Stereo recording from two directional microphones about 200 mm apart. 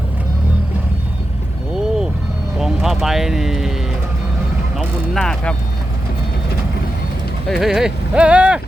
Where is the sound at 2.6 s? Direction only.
Centre (ahead or behind).